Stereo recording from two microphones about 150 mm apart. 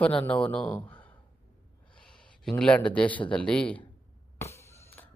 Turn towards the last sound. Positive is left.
turn(degrees=15)  # may be behind; listen again after turning